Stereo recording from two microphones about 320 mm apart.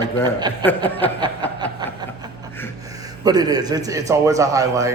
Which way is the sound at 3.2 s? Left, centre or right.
Centre.